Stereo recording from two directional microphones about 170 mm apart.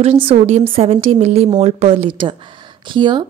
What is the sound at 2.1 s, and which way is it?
A woman's voice, 30° right (ahead or behind).